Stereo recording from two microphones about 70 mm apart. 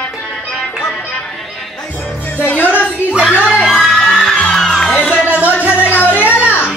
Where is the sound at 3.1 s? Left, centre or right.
Centre.